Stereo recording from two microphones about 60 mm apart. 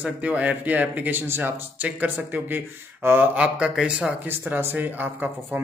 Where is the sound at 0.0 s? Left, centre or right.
Right.